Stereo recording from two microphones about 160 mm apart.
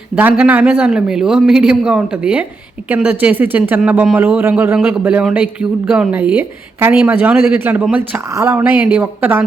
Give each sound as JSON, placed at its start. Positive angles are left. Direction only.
{"t": 0.2, "sound": "a man's voice", "side_deg": -10}